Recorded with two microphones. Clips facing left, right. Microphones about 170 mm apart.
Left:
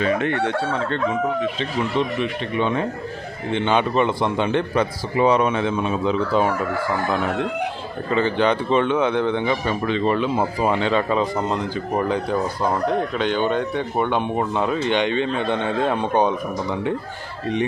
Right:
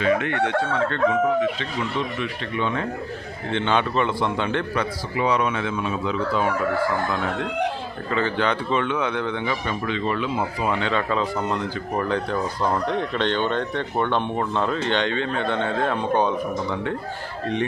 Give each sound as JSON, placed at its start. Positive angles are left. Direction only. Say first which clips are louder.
{"t": 0.0, "sound": "speech", "louder": "left 1 dB", "side_deg": 35}
{"t": 1.5, "sound": "a man's voice", "louder": "left 4 dB", "side_deg": 20}
{"t": 8.1, "sound": "a man's voice", "louder": "left 4 dB", "side_deg": 20}
{"t": 10.7, "sound": "speech", "louder": "left 3 dB", "side_deg": 20}